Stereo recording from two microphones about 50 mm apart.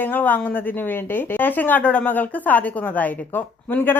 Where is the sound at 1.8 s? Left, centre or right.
Left.